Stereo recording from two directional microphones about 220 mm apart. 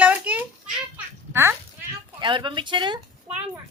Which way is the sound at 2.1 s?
20° right (ahead or behind).